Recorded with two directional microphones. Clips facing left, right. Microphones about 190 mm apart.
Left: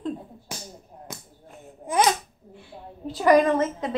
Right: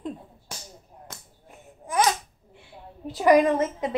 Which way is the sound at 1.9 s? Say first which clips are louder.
Left 2 dB; 20° left (ahead or behind).